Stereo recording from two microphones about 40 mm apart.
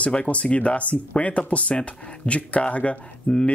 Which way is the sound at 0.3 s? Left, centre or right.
Left.